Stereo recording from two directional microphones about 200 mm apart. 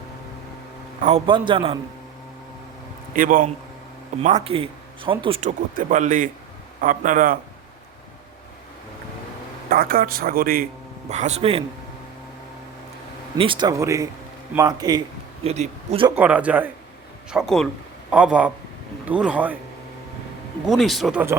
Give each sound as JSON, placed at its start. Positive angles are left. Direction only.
{"t": 1.0, "sound": "speech", "side_deg": -30}
{"t": 3.1, "sound": "speech", "side_deg": -45}
{"t": 9.6, "sound": "speech", "side_deg": -45}
{"t": 11.1, "sound": "speech", "side_deg": -35}
{"t": 13.3, "sound": "speech", "side_deg": -25}
{"t": 15.4, "sound": "speech", "side_deg": -35}
{"t": 16.1, "sound": "speech", "side_deg": -5}
{"t": 20.7, "sound": "speech", "side_deg": 0}